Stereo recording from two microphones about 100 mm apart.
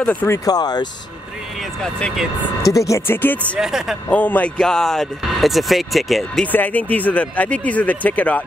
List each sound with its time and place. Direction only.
0.0 s speech: 15° left (ahead or behind)
0.5 s speech: 45° left (ahead or behind)
1.8 s speech: 10° left (ahead or behind)
2.6 s speech: 35° left (ahead or behind)
3.2 s speech: 20° left (ahead or behind)
3.5 s speech: 5° right (ahead or behind)
4.1 s speech: 15° left (ahead or behind); by 6.4 s centre (ahead or behind)
6.4 s speech: 15° left (ahead or behind)